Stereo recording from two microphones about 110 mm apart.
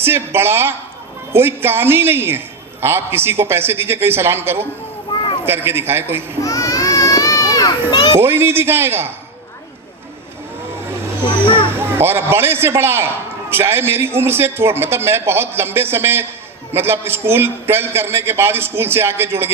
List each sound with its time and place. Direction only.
0.0 s a man's voice: 20° right (ahead or behind)
6.4 s baby cry: 30° left (ahead or behind)
8.2 s a man's voice: 20° right (ahead or behind)
11.4 s music: 50° left (ahead or behind)
11.8 s a man's voice: 20° right (ahead or behind)